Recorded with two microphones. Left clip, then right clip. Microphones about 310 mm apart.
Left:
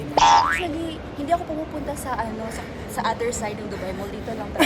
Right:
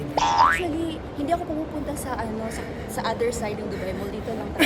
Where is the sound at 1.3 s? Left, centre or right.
Centre.